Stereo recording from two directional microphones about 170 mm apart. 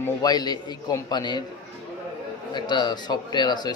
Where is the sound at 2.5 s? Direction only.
25° left (ahead or behind).